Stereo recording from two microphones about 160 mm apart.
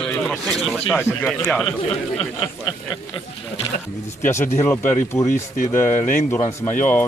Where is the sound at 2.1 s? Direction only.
35° left (ahead or behind).